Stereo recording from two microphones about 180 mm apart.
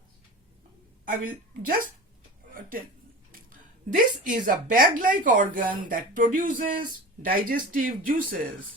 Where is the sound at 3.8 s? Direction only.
50° right (ahead or behind).